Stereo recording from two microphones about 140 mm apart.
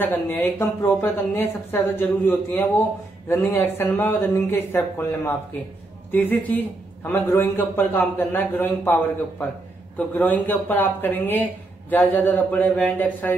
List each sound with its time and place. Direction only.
0.0 s speech: 15° left (ahead or behind)
9.9 s speech: 10° left (ahead or behind)